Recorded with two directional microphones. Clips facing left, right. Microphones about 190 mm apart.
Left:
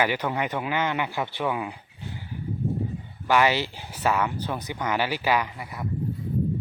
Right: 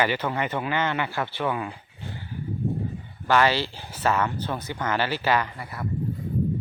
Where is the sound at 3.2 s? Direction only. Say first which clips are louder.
Even; 15° left (ahead or behind).